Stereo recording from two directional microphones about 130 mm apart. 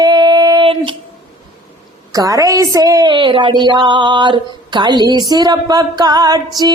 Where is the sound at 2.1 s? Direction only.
25° right (ahead or behind).